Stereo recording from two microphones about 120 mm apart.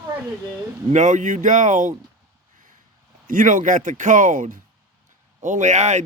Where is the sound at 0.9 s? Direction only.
90° right.